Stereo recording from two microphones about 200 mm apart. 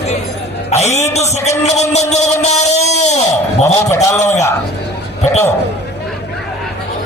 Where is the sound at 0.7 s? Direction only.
35° left (ahead or behind).